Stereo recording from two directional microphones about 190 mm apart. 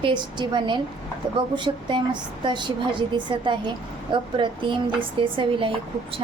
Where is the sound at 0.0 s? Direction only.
25° right (ahead or behind).